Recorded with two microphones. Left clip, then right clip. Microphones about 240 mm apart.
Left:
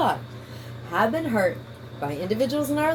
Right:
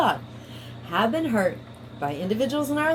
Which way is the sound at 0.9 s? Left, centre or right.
Right.